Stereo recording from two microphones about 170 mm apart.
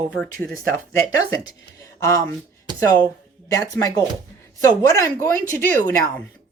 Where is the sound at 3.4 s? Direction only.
20° left (ahead or behind).